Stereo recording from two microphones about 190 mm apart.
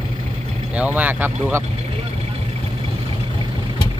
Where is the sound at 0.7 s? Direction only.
5° right (ahead or behind).